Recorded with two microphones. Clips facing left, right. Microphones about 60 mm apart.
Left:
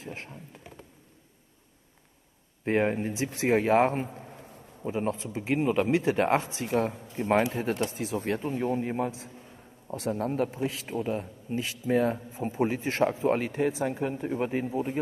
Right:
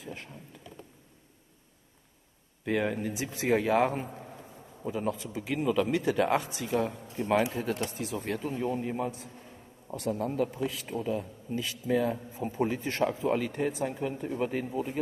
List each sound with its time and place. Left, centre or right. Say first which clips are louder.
0.0 s a sound: left 2 dB; left
2.6 s speech: left 3 dB; left
7.1 s speech: left 1 dB; left
8.1 s speech: left 3 dB; left
13.8 s speech: left 3 dB; left